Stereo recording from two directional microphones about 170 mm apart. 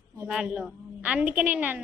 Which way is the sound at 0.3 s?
5° right (ahead or behind).